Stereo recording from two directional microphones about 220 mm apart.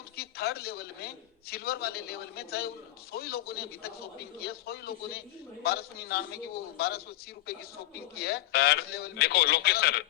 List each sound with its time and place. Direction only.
0.2 s a man's voice: 45° left (ahead or behind)
8.1 s a man's voice: 45° left (ahead or behind)